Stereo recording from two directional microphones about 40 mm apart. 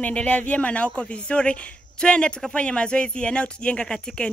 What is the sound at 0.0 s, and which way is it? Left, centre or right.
Speech, left.